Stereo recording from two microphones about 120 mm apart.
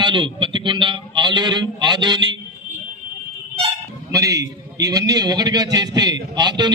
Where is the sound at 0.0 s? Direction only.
40° right (ahead or behind).